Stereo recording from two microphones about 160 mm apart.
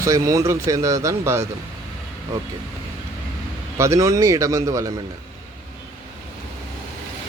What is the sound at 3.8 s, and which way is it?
A man's voice, 20° right (ahead or behind).